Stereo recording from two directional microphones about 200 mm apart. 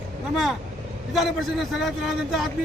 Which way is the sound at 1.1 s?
Centre (ahead or behind).